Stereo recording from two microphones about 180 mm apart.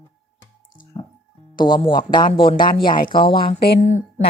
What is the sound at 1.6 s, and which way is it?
A woman's voice, 25° left (ahead or behind).